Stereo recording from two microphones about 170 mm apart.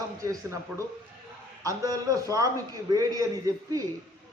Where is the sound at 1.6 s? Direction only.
20° right (ahead or behind).